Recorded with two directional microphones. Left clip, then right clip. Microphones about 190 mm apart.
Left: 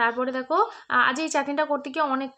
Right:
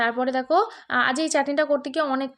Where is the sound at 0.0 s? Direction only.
20° right (ahead or behind).